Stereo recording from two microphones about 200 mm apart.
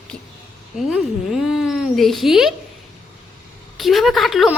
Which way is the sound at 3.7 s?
Centre (ahead or behind).